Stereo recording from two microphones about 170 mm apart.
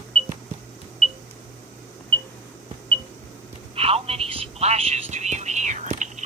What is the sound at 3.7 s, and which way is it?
Telephone, 35° right (ahead or behind).